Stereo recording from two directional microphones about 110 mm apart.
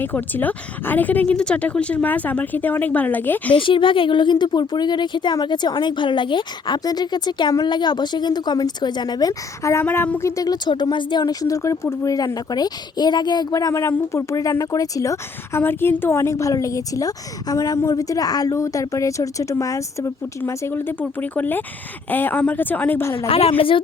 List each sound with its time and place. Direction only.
0.0 s speech: 15° left (ahead or behind)
3.5 s speech: 50° left (ahead or behind)
9.7 s speech: 20° left (ahead or behind)
23.1 s a woman's voice: 60° left (ahead or behind)